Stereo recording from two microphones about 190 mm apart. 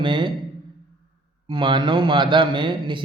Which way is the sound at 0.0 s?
25° right (ahead or behind).